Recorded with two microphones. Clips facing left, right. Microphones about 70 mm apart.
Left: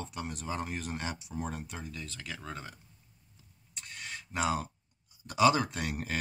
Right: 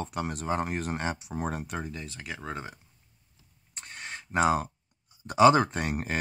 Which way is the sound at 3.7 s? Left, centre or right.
Right.